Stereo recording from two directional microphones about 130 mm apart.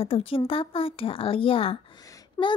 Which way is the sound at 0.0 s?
45° left (ahead or behind).